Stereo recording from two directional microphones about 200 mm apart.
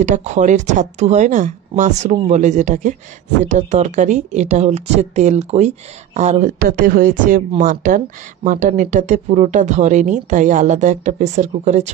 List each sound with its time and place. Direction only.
0.0 s speech: 35° right (ahead or behind)